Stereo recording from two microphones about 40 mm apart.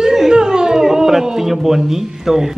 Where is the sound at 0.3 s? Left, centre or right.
Centre.